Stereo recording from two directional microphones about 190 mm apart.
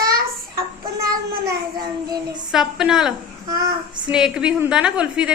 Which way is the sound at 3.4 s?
20° right (ahead or behind).